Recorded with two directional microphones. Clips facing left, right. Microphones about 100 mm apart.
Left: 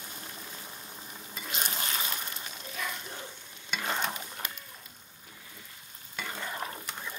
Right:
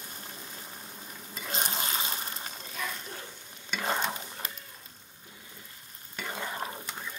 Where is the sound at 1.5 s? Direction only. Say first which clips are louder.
Right 2 dB; 30° right (ahead or behind).